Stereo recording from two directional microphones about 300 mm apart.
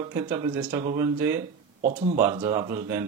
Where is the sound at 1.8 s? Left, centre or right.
Right.